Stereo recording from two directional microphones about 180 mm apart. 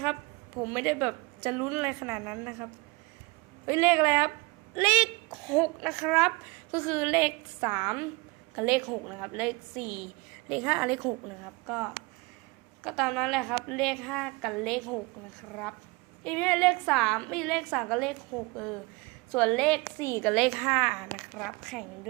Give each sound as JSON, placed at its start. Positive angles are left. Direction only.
{"t": 0.6, "sound": "a woman's voice", "side_deg": -10}
{"t": 3.7, "sound": "a woman's voice", "side_deg": -10}
{"t": 12.8, "sound": "a woman's voice", "side_deg": 0}
{"t": 16.2, "sound": "a woman's voice", "side_deg": 5}
{"t": 19.3, "sound": "a woman's voice", "side_deg": 5}
{"t": 20.3, "sound": "a woman's voice", "side_deg": -5}